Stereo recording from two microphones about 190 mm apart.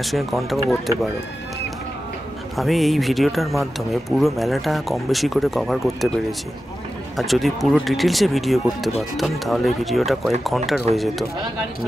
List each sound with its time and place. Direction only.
0.0 s speech: centre (ahead or behind)
2.5 s speech: centre (ahead or behind)
7.2 s speech: centre (ahead or behind)
10.9 s speech: 35° right (ahead or behind)